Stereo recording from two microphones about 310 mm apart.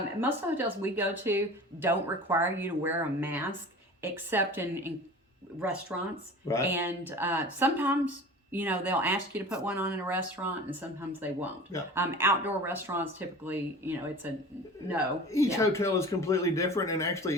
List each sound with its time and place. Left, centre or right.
0.2 s speech: centre
5.9 s speech: centre
15.3 s speech: centre